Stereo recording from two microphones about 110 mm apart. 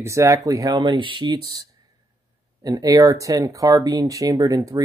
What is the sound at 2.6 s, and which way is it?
Speech, 35° right (ahead or behind).